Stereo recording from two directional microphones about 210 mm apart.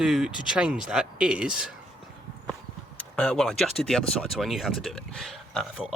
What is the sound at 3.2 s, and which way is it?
Speech, 5° left (ahead or behind).